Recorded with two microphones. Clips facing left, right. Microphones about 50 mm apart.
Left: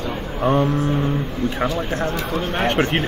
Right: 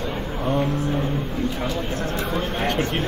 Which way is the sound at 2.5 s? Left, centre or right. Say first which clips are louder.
Left 7 dB; left.